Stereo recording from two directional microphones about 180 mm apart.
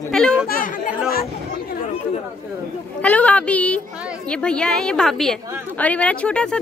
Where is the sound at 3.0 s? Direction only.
10° left (ahead or behind).